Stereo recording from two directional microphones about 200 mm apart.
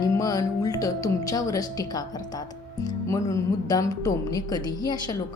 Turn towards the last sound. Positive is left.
turn(degrees=20)  # may be behind; listen again after turning